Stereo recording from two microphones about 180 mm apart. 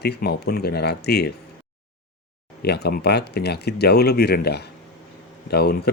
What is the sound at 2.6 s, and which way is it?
A man's voice, 65° left (ahead or behind).